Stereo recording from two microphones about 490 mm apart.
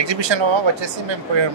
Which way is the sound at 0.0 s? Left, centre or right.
Right.